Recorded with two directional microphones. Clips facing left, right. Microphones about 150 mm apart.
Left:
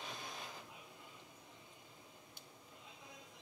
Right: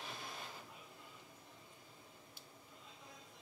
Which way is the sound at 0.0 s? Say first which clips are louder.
Left 1 dB; 5° right (ahead or behind).